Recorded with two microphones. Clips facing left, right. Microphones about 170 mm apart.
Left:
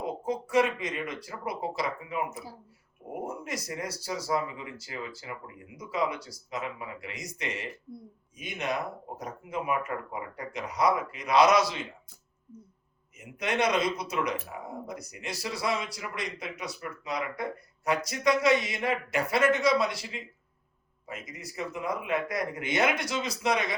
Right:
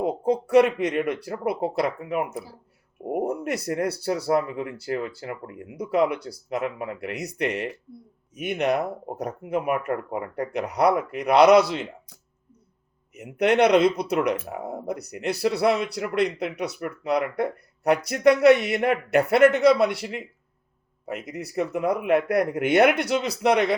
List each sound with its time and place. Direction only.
0.0 s speech: 60° right (ahead or behind)
13.1 s speech: 65° right (ahead or behind)